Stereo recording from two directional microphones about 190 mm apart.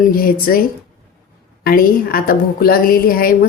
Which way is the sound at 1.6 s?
50° left (ahead or behind).